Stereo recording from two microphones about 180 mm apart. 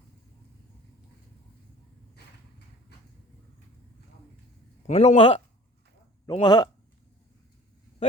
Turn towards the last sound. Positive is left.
turn(degrees=25)  # may be behind; listen again after turning